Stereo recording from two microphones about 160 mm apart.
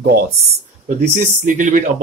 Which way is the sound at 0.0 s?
70° right (ahead or behind).